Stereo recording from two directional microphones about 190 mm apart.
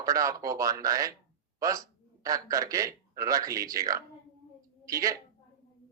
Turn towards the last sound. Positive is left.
turn(degrees=-15)  # may be behind; listen again after turning